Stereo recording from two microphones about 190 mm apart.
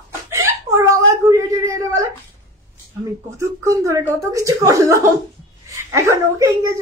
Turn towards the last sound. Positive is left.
turn(degrees=-15)  # may be behind; listen again after turning